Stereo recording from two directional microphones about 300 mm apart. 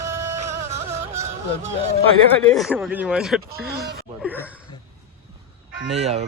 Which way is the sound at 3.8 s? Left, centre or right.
Right.